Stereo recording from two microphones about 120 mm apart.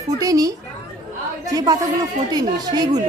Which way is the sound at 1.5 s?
30° right (ahead or behind).